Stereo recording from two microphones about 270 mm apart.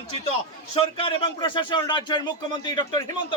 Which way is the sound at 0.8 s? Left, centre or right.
Centre.